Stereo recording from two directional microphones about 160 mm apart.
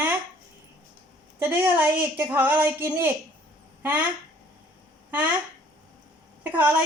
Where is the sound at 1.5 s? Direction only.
10° right (ahead or behind).